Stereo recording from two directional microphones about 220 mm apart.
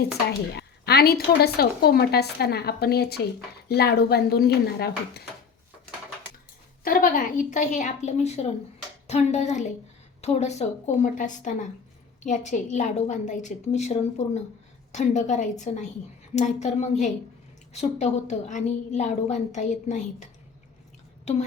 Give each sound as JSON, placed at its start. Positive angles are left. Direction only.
{"t": 0.3, "sound": "speech", "side_deg": 50}
{"t": 6.8, "sound": "a woman's voice", "side_deg": 40}